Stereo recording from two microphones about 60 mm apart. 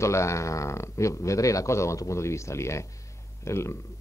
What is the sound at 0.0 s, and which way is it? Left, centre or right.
Speech, left.